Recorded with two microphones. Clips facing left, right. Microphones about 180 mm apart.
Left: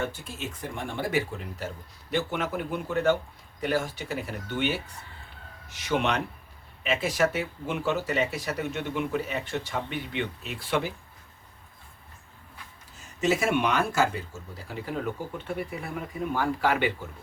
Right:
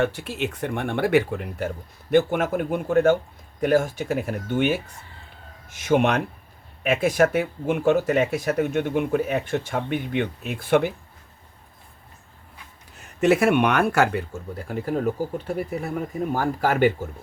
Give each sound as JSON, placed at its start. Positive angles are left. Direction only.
{"t": 0.0, "sound": "speech", "side_deg": -70}
{"t": 13.0, "sound": "speech", "side_deg": -60}